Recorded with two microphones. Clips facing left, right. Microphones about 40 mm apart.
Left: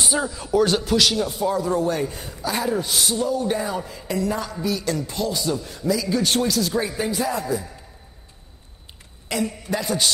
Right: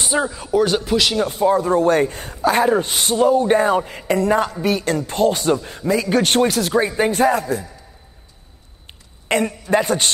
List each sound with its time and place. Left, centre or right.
0.0 s speech: right
1.1 s a man's voice: right
1.9 s a man's voice: right
6.1 s speech: right
9.3 s a man's voice: right